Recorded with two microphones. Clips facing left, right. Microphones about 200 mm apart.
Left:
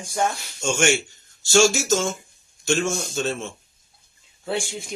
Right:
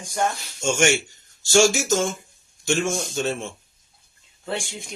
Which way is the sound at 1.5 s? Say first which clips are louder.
Even; 50° right (ahead or behind).